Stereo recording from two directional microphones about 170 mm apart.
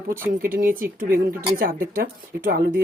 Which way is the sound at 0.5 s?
55° right (ahead or behind).